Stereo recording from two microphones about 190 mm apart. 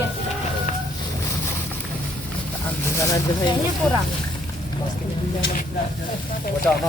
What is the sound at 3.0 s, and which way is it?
Speech, 15° left (ahead or behind).